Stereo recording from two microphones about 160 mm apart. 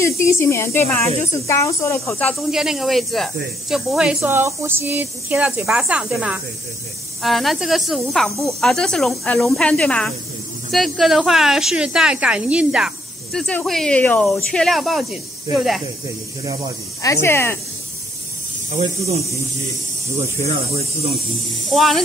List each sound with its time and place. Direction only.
0.0 s speech: 15° left (ahead or behind)
2.5 s a woman's voice: 5° right (ahead or behind)
17.0 s speech: 15° left (ahead or behind)
18.7 s speech: 40° right (ahead or behind)
21.6 s a woman's voice: centre (ahead or behind)